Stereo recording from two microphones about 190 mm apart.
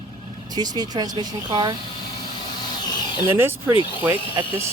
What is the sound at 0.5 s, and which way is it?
Speech, 20° right (ahead or behind).